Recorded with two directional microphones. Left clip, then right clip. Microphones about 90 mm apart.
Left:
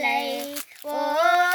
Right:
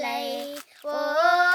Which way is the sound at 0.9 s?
25° right (ahead or behind).